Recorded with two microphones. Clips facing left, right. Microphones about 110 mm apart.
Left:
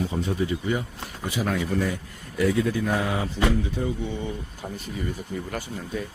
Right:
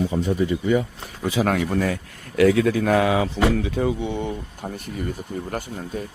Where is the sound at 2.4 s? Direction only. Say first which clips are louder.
Right 6 dB; 90° right; by 4.3 s 65° right (ahead or behind).